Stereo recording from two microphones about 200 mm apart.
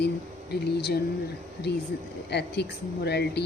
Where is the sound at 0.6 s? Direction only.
55° left (ahead or behind).